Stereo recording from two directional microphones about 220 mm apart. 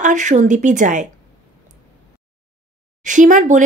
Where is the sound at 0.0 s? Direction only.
35° right (ahead or behind).